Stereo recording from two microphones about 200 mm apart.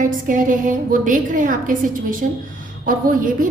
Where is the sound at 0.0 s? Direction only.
40° right (ahead or behind).